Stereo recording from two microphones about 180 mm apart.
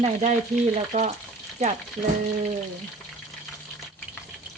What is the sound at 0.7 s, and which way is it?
Speech, 40° right (ahead or behind).